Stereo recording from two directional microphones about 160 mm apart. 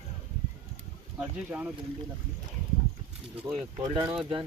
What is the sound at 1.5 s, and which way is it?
Speech, 5° right (ahead or behind).